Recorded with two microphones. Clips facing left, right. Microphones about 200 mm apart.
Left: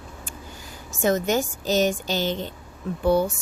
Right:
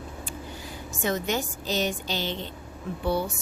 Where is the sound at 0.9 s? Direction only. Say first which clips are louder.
Left 6 dB; 45° left (ahead or behind).